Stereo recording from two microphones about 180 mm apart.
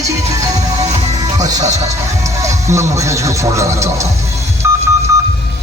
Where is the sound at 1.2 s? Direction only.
20° right (ahead or behind).